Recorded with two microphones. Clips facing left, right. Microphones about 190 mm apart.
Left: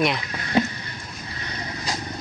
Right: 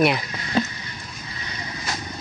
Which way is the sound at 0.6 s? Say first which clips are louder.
Left 2 dB; 15° left (ahead or behind).